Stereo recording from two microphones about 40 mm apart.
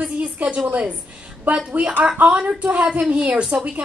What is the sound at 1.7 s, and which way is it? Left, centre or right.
A woman's voice, right.